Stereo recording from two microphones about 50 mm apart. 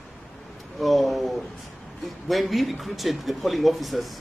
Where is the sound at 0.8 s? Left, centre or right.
Centre.